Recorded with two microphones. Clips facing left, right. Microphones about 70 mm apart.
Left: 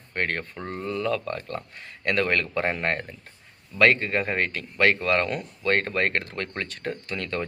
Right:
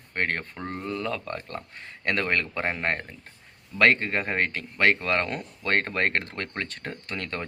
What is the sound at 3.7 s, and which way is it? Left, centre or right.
Speech, right.